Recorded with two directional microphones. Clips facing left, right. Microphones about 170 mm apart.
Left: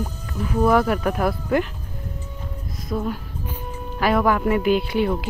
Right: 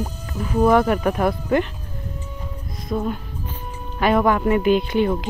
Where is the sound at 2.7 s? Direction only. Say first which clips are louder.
Right 2 dB; centre (ahead or behind).